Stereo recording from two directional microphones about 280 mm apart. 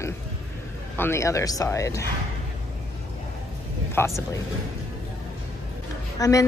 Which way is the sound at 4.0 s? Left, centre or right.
Centre.